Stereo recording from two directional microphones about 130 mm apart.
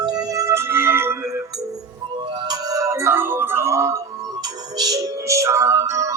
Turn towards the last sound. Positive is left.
turn(degrees=-25)  # may be behind; listen again after turning